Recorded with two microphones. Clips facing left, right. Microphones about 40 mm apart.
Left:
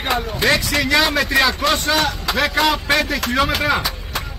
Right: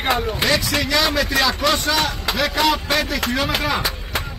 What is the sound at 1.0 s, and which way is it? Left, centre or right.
Speech, centre.